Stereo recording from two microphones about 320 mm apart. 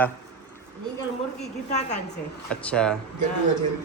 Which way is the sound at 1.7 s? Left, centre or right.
Left.